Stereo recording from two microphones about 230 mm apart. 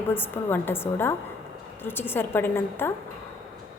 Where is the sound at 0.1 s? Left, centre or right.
Centre.